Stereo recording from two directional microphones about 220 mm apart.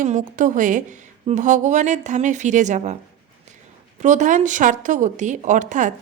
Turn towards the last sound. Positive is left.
turn(degrees=-35)  # may be behind; listen again after turning